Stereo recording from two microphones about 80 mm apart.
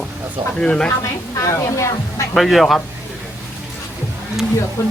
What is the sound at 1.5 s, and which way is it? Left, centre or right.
Speech, left.